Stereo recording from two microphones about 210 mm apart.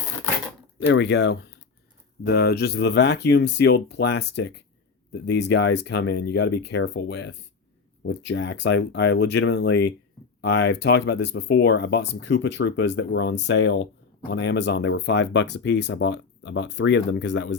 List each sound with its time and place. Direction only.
0.8 s speech: 55° left (ahead or behind)